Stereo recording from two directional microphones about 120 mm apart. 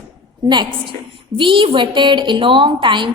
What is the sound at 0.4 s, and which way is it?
A woman's voice, 40° right (ahead or behind).